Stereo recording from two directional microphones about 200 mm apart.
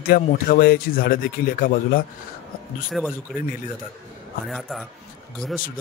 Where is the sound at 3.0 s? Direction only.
Centre (ahead or behind).